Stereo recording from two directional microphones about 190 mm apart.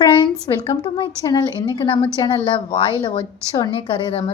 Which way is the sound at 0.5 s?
20° left (ahead or behind).